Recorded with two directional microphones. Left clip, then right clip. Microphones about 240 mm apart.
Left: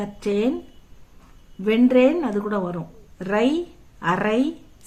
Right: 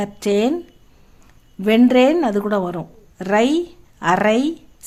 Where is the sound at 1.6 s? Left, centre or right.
Right.